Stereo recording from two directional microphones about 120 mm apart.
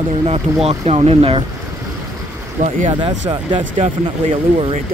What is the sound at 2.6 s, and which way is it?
Speech, 90° right.